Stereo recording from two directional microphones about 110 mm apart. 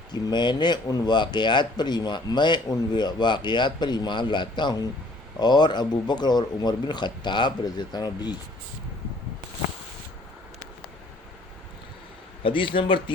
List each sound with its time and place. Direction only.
0.1 s speech: 40° left (ahead or behind)
12.4 s speech: 50° left (ahead or behind)